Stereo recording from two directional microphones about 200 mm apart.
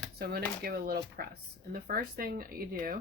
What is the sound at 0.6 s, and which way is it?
Speech, 50° right (ahead or behind).